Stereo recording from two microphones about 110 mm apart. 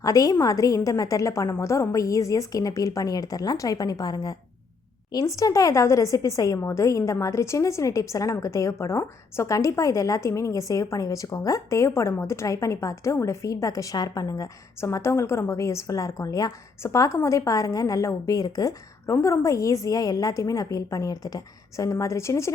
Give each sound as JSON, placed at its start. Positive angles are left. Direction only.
{"t": 0.0, "sound": "a woman's voice", "side_deg": 30}